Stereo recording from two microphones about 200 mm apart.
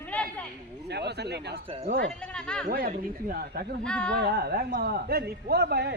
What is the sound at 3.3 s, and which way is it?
Speech, 50° right (ahead or behind).